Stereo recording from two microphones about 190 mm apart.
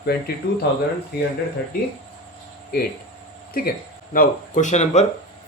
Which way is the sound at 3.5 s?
50° left (ahead or behind).